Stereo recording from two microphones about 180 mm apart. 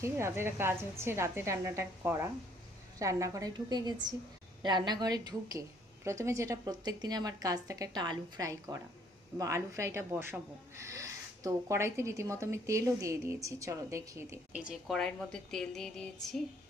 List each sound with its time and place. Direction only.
0.0 s a woman's voice: 15° right (ahead or behind); by 16.0 s 5° left (ahead or behind)